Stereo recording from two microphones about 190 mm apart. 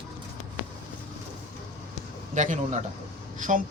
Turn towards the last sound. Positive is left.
turn(degrees=-45)  # may be behind; listen again after turning